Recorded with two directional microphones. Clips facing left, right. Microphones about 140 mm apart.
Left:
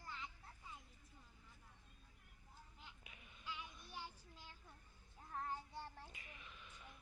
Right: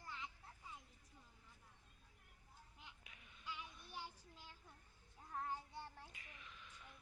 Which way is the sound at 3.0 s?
10° left (ahead or behind).